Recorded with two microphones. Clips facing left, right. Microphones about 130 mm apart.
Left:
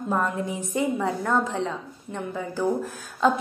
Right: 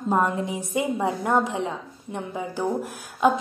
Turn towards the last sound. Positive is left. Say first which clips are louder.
# right 1 dB
turn(degrees=-15)  # may be behind; listen again after turning